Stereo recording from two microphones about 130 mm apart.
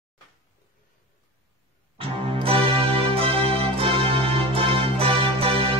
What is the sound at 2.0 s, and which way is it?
Music, 45° right (ahead or behind).